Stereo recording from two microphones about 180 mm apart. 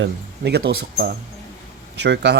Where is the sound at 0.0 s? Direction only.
65° right (ahead or behind).